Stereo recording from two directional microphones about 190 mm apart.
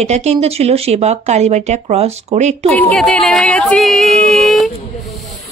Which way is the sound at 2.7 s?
5° left (ahead or behind).